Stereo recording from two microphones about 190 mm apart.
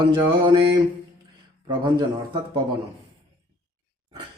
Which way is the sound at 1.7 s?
25° right (ahead or behind).